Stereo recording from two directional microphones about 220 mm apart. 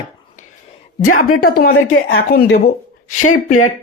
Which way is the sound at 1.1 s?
40° left (ahead or behind).